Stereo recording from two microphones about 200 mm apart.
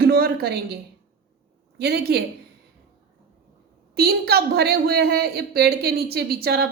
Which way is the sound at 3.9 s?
50° right (ahead or behind).